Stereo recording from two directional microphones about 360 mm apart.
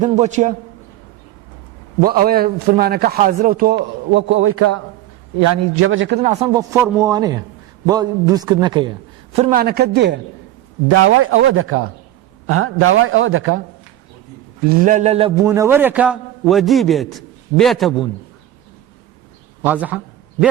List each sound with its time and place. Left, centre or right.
0.0 s a man's voice: centre
2.0 s a man's voice: right
6.2 s a man's voice: centre; by 13.6 s right
14.8 s a man's voice: centre
19.6 s a man's voice: centre